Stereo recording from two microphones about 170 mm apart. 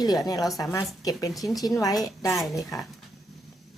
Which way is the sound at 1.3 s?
Centre (ahead or behind).